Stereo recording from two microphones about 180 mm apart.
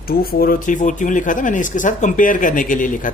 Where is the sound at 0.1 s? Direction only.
55° left (ahead or behind).